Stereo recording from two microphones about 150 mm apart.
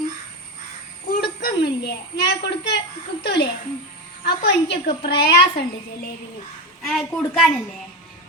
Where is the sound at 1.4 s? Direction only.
90° left.